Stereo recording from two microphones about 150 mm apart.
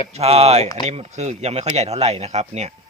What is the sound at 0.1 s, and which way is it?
Speech, 45° right (ahead or behind).